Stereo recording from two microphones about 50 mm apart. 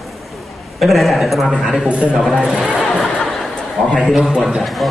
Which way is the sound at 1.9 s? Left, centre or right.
Right.